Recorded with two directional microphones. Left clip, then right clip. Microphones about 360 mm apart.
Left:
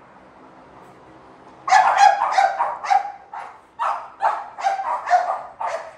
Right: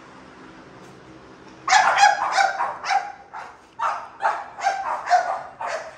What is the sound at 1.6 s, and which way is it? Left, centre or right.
Dog, left.